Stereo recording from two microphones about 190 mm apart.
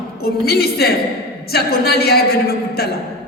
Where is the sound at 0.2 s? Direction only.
55° left (ahead or behind).